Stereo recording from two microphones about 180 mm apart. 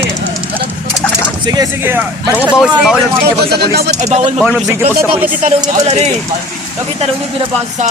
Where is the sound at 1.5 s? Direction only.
15° right (ahead or behind).